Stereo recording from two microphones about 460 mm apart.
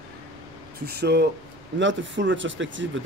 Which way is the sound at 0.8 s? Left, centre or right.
Right.